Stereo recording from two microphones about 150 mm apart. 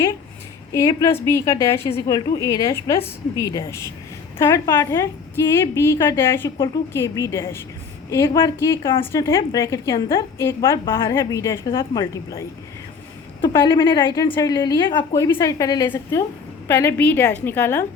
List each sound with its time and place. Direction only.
0.7 s a woman's voice: 20° left (ahead or behind)
15.1 s a woman's voice: 20° left (ahead or behind)